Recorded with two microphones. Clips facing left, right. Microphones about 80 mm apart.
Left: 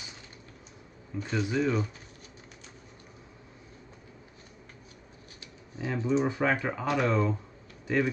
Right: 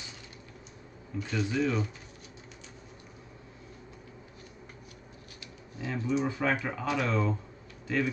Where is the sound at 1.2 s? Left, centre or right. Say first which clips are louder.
Left 1 dB; left.